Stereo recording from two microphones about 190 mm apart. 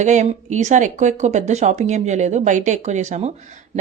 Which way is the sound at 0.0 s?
40° right (ahead or behind).